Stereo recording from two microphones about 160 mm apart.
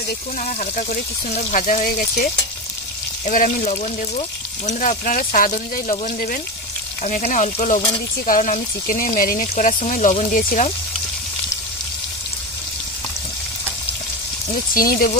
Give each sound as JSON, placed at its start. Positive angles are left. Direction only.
{"t": 0.4, "sound": "speech", "side_deg": 50}
{"t": 14.7, "sound": "speech", "side_deg": 65}